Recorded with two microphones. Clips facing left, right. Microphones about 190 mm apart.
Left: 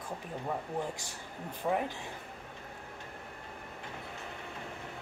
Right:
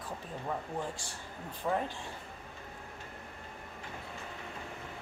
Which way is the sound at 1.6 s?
10° left (ahead or behind).